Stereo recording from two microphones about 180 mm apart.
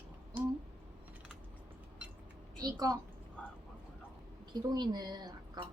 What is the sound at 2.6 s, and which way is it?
Speech, 20° right (ahead or behind).